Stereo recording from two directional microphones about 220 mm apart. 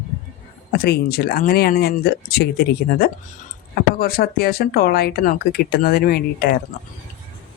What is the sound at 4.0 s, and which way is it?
Speech, 45° left (ahead or behind).